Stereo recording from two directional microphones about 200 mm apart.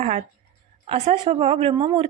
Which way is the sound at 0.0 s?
35° right (ahead or behind).